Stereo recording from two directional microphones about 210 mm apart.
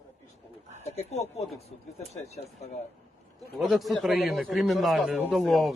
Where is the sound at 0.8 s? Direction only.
30° left (ahead or behind).